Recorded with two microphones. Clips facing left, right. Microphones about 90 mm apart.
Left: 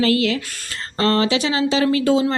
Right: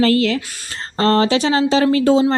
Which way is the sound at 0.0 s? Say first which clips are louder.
Right 3 dB; 40° right (ahead or behind).